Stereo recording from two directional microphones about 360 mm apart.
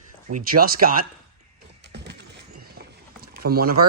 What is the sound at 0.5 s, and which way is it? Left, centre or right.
Speech, right.